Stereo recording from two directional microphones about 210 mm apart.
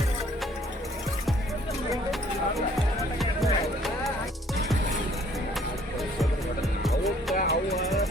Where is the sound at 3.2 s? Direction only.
Centre (ahead or behind).